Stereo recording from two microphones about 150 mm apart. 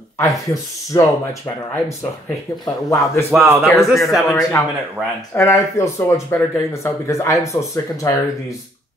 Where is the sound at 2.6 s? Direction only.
20° left (ahead or behind).